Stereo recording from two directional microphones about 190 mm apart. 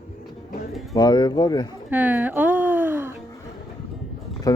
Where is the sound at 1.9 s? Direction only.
10° right (ahead or behind).